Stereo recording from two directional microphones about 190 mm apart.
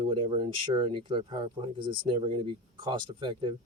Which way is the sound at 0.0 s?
25° right (ahead or behind).